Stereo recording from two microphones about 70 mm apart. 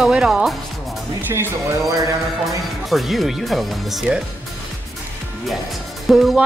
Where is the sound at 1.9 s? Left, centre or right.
Right.